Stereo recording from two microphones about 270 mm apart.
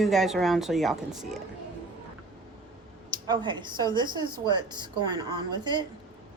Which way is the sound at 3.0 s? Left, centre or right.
Centre.